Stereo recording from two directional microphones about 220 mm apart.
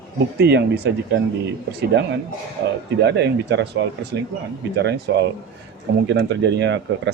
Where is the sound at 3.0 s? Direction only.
50° right (ahead or behind).